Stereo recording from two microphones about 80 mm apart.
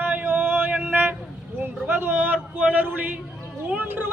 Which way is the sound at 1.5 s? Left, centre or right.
Right.